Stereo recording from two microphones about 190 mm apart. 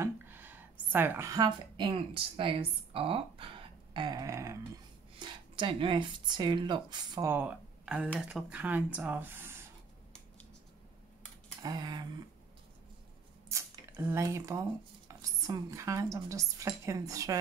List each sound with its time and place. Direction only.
0.0 s a woman's voice: 10° right (ahead or behind)
11.6 s speech: 20° right (ahead or behind)
13.5 s speech: 15° right (ahead or behind)